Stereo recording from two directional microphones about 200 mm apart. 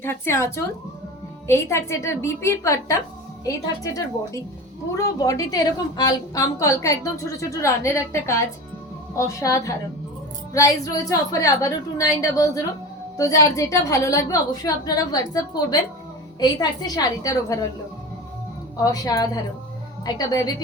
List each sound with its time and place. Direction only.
0.0 s a woman's voice: 10° left (ahead or behind)
18.8 s a woman's voice: 20° left (ahead or behind)